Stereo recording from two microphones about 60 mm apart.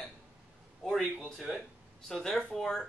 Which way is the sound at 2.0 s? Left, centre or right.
Centre.